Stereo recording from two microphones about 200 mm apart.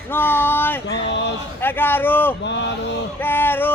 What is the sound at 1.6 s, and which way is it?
Speech, 10° left (ahead or behind).